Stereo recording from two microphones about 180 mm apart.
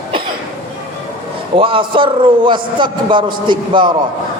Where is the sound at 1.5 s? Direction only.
30° right (ahead or behind).